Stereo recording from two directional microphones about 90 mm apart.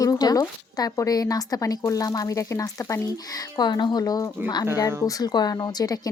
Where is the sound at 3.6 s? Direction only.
55° left (ahead or behind).